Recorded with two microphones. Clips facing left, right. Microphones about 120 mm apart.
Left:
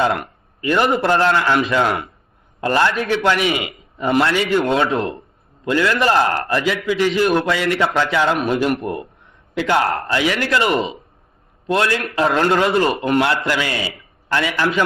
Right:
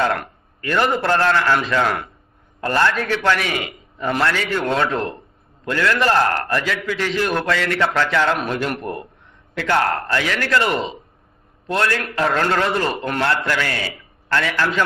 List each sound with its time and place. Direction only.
0.0 s a man's voice: 10° left (ahead or behind)
4.2 s a man's voice: 25° left (ahead or behind)
4.9 s a man's voice: 5° left (ahead or behind)
9.6 s a man's voice: 15° left (ahead or behind)
11.9 s a man's voice: 25° left (ahead or behind)